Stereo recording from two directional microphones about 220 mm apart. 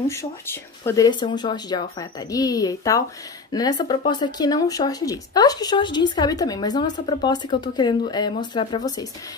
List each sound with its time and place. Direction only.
0.1 s speech: 10° left (ahead or behind)